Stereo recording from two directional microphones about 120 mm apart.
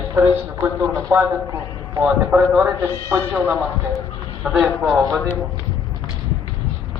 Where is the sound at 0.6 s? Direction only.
15° right (ahead or behind).